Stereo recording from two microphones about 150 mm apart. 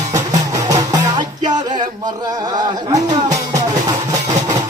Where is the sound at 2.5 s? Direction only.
25° right (ahead or behind).